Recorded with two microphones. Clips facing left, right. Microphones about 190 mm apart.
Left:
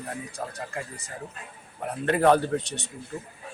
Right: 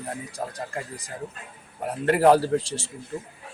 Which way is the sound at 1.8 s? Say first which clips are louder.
Right 3 dB; 30° right (ahead or behind).